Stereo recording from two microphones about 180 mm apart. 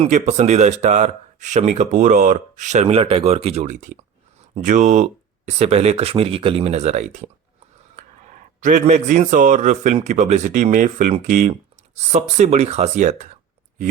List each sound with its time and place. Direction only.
0.0 s speech: 40° right (ahead or behind)
2.8 s speech: 30° right (ahead or behind)
7.9 s a sound: 45° right (ahead or behind)
8.8 s speech: 40° right (ahead or behind)